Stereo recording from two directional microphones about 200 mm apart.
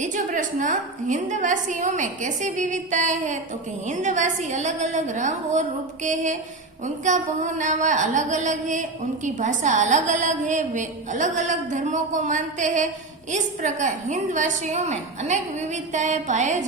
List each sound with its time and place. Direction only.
0.0 s speech: 40° right (ahead or behind)